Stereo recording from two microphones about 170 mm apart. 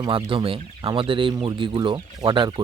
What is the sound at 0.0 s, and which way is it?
Speech, 30° right (ahead or behind).